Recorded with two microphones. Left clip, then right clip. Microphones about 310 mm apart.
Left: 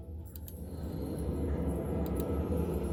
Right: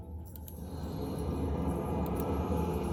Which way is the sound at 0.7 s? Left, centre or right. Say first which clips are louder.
Right 1 dB; right.